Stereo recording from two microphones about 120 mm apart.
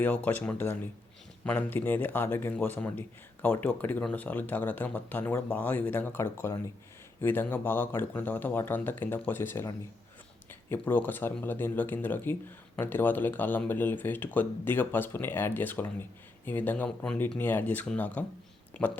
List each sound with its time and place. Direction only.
0.0 s speech: 15° left (ahead or behind)